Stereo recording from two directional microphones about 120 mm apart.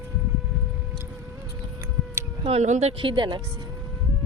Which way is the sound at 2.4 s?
65° right (ahead or behind).